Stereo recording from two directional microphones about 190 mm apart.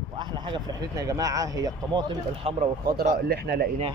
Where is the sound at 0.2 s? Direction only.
25° right (ahead or behind).